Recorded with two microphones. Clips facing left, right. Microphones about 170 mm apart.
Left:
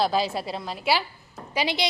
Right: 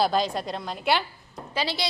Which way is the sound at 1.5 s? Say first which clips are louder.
Left 2 dB; 15° left (ahead or behind).